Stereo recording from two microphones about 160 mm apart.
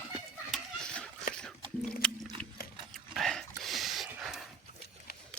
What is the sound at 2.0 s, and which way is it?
Biting, 5° left (ahead or behind).